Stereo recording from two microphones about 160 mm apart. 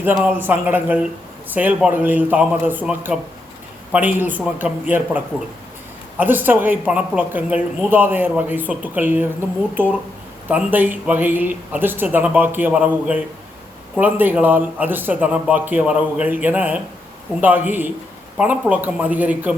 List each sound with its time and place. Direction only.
0.0 s speech: 10° right (ahead or behind)